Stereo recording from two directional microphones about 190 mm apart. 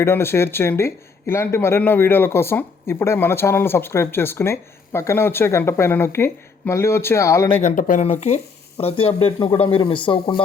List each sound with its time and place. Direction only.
0.0 s speech: 10° left (ahead or behind)
7.6 s speech: 45° left (ahead or behind); by 10.4 s 25° left (ahead or behind)